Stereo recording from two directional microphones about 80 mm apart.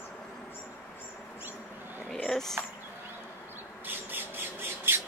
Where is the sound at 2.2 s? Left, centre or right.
Centre.